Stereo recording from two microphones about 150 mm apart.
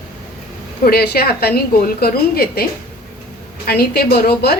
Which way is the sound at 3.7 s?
90° left.